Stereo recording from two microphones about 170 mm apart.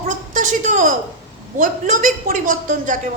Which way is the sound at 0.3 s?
50° right (ahead or behind).